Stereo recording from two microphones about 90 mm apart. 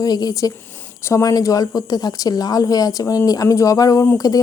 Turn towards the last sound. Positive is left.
turn(degrees=40)  # may be behind; listen again after turning